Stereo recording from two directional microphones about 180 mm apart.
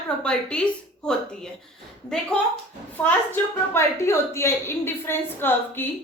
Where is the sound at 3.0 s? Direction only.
5° left (ahead or behind).